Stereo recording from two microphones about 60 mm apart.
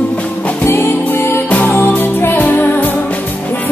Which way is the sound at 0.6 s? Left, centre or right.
Left.